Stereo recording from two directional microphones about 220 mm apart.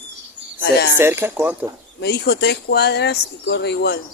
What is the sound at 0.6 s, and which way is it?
Speech, 50° left (ahead or behind).